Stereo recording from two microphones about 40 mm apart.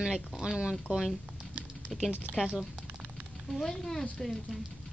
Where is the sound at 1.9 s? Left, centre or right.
Centre.